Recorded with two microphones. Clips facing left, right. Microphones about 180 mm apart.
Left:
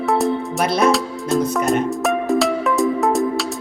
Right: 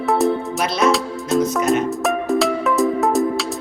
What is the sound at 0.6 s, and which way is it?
Speech, 55° left (ahead or behind).